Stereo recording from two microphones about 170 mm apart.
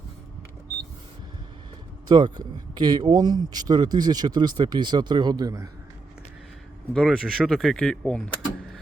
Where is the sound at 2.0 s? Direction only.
25° right (ahead or behind).